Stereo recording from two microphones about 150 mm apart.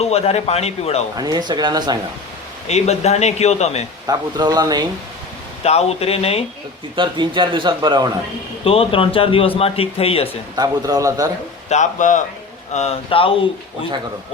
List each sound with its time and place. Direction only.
0.0 s a man's voice: 45° left (ahead or behind)
1.1 s speech: 25° right (ahead or behind)
2.6 s a man's voice: 45° left (ahead or behind)
4.0 s speech: 25° right (ahead or behind)
5.6 s a man's voice: 45° left (ahead or behind)
6.9 s a man's voice: 30° right (ahead or behind)
8.6 s speech: 40° left (ahead or behind)
10.5 s speech: 25° right (ahead or behind)
11.7 s a man's voice: 55° left (ahead or behind)
12.7 s speech: 45° left (ahead or behind)